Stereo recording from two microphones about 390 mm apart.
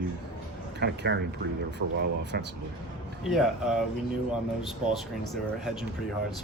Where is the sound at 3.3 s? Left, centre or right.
Centre.